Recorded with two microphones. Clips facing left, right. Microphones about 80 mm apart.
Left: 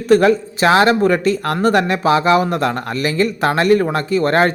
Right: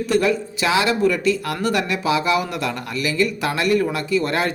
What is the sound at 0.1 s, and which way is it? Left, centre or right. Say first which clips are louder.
A man's voice: left 8 dB; left.